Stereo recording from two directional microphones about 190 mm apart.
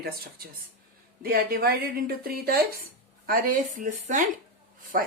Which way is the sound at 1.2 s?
50° right (ahead or behind).